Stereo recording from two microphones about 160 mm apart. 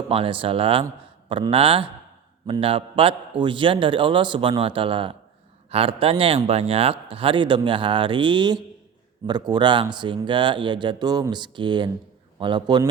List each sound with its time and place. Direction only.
0.1 s a man's voice: 35° right (ahead or behind)